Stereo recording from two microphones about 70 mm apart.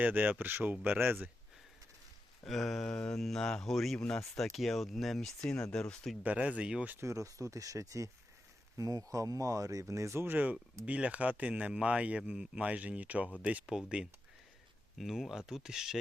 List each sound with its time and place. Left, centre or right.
0.0 s speech: right
2.4 s speech: centre
2.8 s mantra: centre
4.0 s speech: centre
5.7 s mantra: centre
6.2 s speech: centre
7.0 s speech: right
10.2 s speech: right
14.9 s speech: centre